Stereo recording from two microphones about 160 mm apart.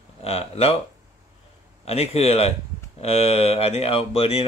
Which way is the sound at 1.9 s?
40° left (ahead or behind).